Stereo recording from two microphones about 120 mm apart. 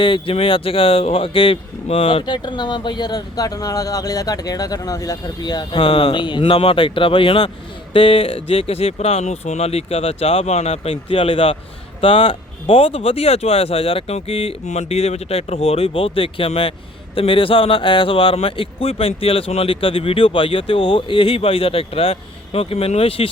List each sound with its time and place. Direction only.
0.0 s speech: 45° left (ahead or behind)
2.2 s speech: 35° left (ahead or behind)
14.7 s speech: 65° left (ahead or behind)